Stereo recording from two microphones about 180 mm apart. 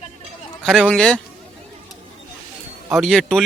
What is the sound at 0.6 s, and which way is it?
Speech, centre (ahead or behind).